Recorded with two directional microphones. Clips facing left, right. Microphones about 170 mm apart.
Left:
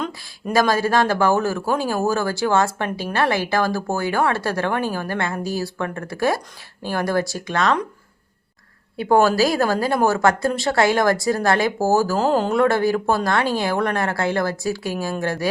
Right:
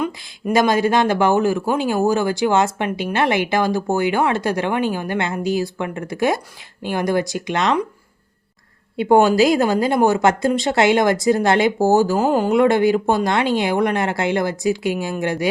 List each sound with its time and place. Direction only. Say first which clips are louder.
0.5 s a woman's voice: right 2 dB; 20° right (ahead or behind)
9.0 s a woman's voice: right 3 dB; 20° right (ahead or behind)